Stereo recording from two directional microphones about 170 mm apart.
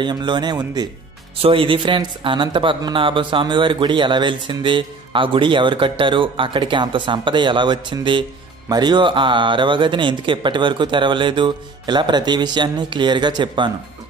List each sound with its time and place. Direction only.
0.0 s speech: 25° right (ahead or behind)